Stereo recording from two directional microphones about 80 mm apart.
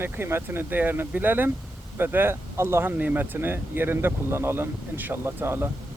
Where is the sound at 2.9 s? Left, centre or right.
Right.